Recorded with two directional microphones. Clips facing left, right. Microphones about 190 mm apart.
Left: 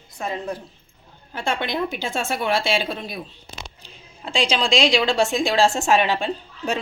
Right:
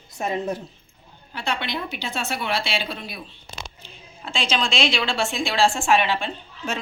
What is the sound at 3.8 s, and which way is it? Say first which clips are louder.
A woman's voice: left 2 dB; 35° left (ahead or behind).